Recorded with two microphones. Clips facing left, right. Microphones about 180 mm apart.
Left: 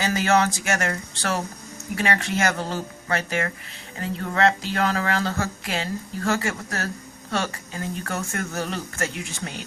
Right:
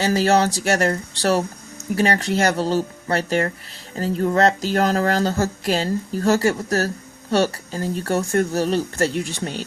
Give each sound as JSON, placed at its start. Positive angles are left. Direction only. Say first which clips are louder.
{"t": 0.0, "sound": "speech", "louder": "right 4 dB", "side_deg": -35}